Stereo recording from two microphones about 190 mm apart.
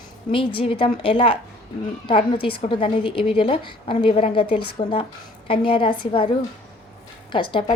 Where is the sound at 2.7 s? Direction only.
25° left (ahead or behind).